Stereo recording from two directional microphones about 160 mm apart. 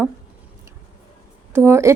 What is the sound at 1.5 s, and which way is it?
Speech, 15° right (ahead or behind).